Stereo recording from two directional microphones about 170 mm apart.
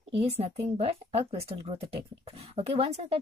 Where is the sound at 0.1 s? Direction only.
35° right (ahead or behind).